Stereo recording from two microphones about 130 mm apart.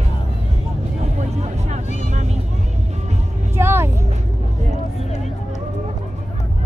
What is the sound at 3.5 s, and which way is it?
Vehicle, 20° right (ahead or behind).